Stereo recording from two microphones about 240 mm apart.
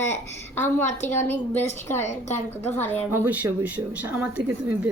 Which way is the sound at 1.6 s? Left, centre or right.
Left.